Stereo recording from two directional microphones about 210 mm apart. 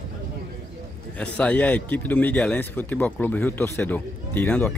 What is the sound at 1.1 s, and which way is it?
Speech, 5° left (ahead or behind).